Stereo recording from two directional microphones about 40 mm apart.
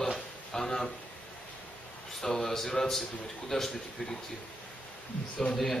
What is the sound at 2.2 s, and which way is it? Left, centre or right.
A man's voice, centre.